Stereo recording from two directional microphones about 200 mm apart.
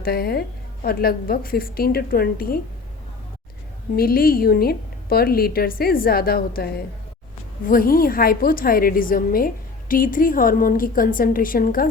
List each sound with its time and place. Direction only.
0.0 s a woman's voice: 50° left (ahead or behind)
3.9 s a woman's voice: 50° left (ahead or behind)
7.7 s a woman's voice: 45° left (ahead or behind)